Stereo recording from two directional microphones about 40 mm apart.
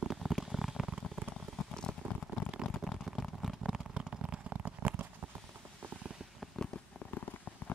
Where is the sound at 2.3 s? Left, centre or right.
Right.